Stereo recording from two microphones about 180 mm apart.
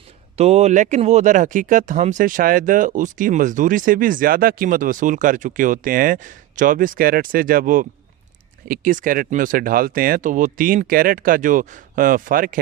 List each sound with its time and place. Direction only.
0.3 s speech: 35° right (ahead or behind)